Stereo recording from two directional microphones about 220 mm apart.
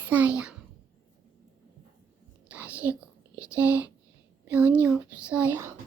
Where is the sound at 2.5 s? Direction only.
5° right (ahead or behind).